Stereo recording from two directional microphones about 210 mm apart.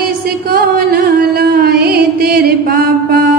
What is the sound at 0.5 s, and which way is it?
Music, 45° right (ahead or behind).